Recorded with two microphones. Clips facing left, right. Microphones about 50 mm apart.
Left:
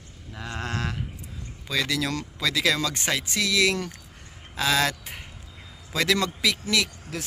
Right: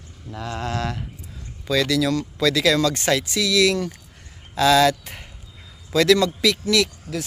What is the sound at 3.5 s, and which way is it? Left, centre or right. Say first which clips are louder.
Speech: right 5 dB; left.